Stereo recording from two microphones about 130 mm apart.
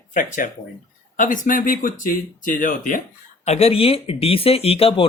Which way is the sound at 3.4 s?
55° left (ahead or behind).